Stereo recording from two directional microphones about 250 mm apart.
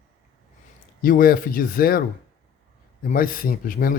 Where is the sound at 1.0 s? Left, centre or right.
Left.